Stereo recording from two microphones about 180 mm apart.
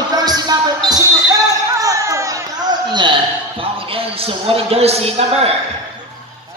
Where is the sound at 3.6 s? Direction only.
30° right (ahead or behind).